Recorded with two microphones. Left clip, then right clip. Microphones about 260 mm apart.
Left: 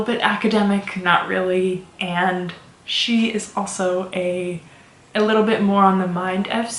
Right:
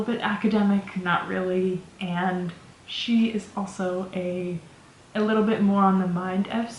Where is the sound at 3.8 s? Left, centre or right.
Right.